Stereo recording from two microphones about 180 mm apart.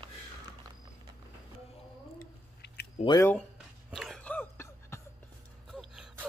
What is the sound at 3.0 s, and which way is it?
Speech, 20° left (ahead or behind).